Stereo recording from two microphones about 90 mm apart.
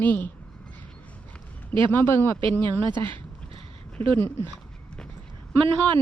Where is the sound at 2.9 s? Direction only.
65° right (ahead or behind).